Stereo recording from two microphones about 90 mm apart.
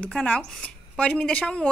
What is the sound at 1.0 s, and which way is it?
Speech, 10° left (ahead or behind).